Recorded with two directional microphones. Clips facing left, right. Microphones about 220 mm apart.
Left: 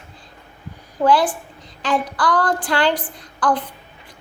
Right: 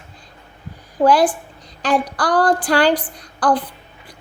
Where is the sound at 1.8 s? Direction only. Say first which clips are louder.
Right 2 dB; 40° right (ahead or behind).